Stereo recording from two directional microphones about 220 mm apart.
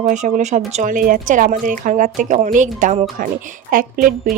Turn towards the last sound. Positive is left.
turn(degrees=-40)  # may be behind; listen again after turning